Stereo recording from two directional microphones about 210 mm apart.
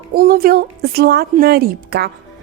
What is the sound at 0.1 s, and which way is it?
Speech, 45° right (ahead or behind).